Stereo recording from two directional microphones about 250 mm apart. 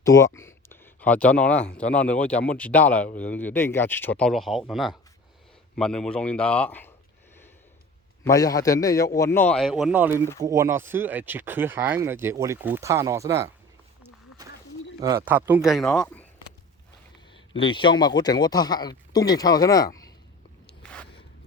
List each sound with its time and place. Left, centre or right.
0.0 s speech: centre
8.2 s speech: centre
15.0 s speech: centre
17.6 s speech: centre
20.8 s a sound: centre